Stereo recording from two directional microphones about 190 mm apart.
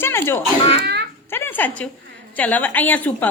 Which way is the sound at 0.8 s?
60° right (ahead or behind).